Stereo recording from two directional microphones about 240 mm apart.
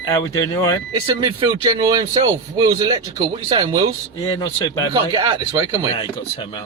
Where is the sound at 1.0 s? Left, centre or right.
Centre.